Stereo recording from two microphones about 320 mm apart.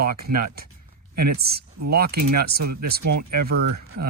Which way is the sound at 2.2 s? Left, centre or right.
Right.